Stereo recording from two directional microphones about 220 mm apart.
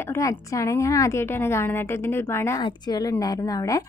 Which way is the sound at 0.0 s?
15° left (ahead or behind).